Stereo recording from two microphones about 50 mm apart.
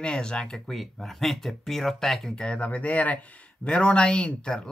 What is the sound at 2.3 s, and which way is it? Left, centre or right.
Speech, left.